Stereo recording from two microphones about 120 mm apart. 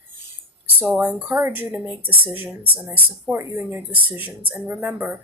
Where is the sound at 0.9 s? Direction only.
10° right (ahead or behind).